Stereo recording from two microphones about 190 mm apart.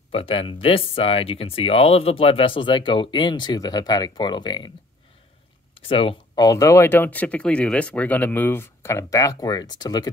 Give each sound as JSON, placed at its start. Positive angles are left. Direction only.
{"t": 0.1, "sound": "speech", "side_deg": 30}
{"t": 5.8, "sound": "speech", "side_deg": 30}